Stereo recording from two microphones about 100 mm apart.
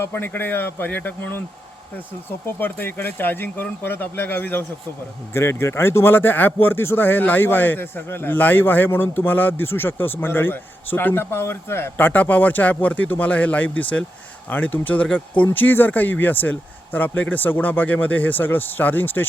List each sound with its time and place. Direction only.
0.0 s a man's voice: 20° left (ahead or behind)
2.6 s a man's voice: 20° left (ahead or behind)